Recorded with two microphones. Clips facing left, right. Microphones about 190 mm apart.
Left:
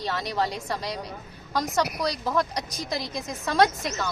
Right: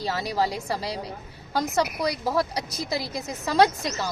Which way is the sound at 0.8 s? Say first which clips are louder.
Right 1 dB; 30° right (ahead or behind).